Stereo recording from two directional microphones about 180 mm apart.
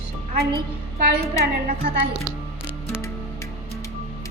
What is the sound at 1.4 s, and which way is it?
Speech, 65° right (ahead or behind).